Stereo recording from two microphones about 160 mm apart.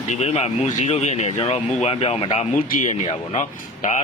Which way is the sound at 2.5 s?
50° left (ahead or behind).